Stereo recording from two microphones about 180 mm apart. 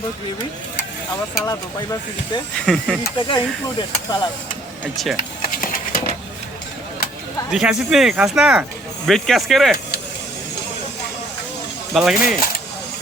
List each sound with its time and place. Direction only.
1.5 s speech: 20° left (ahead or behind)
2.6 s speech: 5° left (ahead or behind)
3.2 s speech: 25° left (ahead or behind)
5.5 s a sound: 50° left (ahead or behind)
7.5 s speech: 5° right (ahead or behind)
11.9 s speech: centre (ahead or behind)